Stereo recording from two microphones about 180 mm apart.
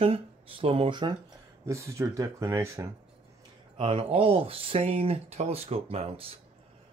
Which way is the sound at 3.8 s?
30° right (ahead or behind).